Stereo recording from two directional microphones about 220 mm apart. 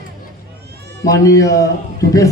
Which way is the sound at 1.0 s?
15° left (ahead or behind).